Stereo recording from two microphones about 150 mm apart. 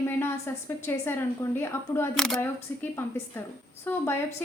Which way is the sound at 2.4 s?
15° left (ahead or behind).